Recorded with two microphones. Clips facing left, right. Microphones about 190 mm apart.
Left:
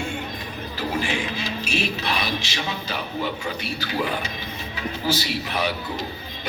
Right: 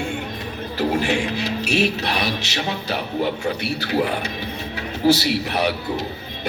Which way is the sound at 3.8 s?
65° right (ahead or behind).